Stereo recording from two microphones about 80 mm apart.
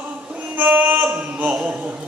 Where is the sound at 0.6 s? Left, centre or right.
Right.